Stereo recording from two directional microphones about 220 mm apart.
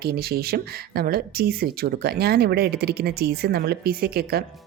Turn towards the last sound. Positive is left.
turn(degrees=-45)  # may be behind; listen again after turning